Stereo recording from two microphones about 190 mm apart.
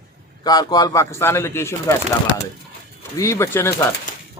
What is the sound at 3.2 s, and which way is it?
Speech, 15° left (ahead or behind).